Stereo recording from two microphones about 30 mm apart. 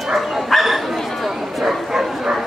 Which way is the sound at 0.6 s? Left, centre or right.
Centre.